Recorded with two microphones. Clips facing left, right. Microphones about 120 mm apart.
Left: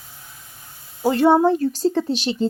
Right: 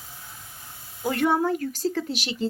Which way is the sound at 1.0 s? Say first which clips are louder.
Left 8 dB; 30° left (ahead or behind).